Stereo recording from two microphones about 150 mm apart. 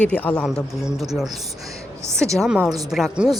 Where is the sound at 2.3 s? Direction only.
5° right (ahead or behind).